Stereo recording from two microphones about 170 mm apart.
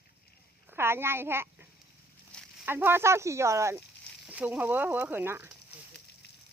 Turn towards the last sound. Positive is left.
turn(degrees=-15)  # may be behind; listen again after turning